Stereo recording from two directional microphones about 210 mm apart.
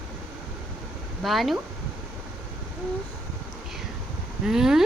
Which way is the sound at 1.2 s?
Centre (ahead or behind).